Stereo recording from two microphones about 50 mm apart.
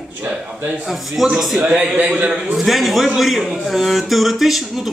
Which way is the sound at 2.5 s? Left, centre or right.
Centre.